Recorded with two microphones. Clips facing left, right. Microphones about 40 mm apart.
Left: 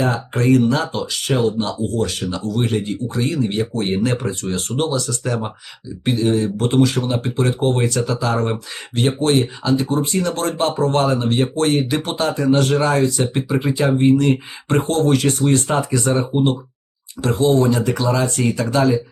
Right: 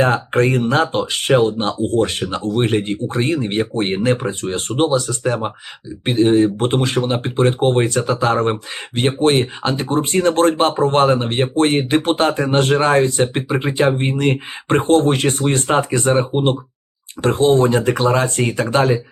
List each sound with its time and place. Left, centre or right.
0.0 s speech: right